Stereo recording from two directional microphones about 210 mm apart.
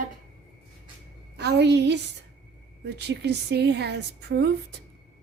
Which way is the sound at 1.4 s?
50° right (ahead or behind).